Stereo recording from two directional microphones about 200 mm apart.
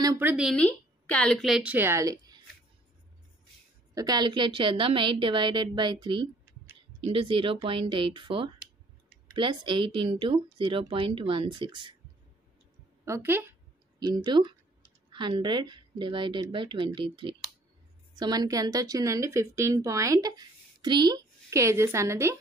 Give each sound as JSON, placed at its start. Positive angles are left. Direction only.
{"t": 0.0, "sound": "a woman's voice", "side_deg": -15}
{"t": 3.9, "sound": "a woman's voice", "side_deg": -20}
{"t": 13.0, "sound": "a sound", "side_deg": -10}
{"t": 15.0, "sound": "a woman's voice", "side_deg": -25}